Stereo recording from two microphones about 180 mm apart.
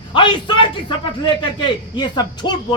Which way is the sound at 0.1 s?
30° left (ahead or behind).